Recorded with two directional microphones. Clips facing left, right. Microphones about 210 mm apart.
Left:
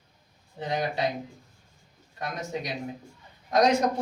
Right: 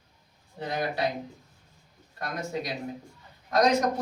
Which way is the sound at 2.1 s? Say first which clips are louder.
Even; 20° left (ahead or behind).